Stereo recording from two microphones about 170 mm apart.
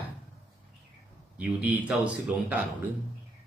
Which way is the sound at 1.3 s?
5° right (ahead or behind).